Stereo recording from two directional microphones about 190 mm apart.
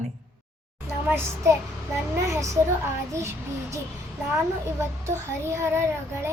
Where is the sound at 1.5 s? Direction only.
15° right (ahead or behind).